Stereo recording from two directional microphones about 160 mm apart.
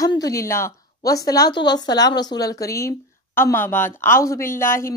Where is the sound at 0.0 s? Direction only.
20° left (ahead or behind).